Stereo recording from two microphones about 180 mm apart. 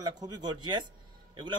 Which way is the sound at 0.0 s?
25° right (ahead or behind).